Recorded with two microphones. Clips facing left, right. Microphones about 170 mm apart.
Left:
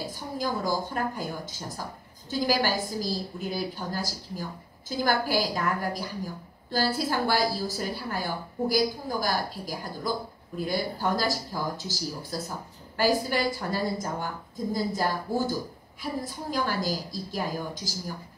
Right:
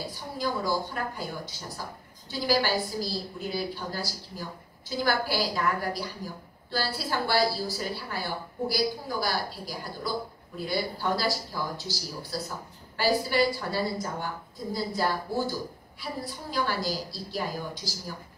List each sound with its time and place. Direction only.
0.1 s a woman's voice: 45° left (ahead or behind)